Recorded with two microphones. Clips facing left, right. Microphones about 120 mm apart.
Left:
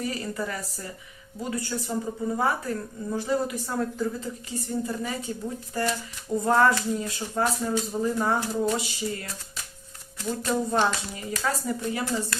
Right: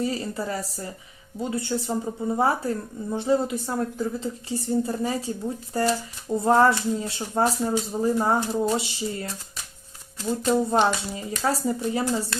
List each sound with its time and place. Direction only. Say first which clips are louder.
0.0 s speech: right 3 dB; 25° right (ahead or behind)
10.2 s speech: right 4 dB; 25° right (ahead or behind)